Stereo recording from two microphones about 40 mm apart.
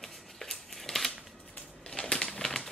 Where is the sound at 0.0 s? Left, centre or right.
Centre.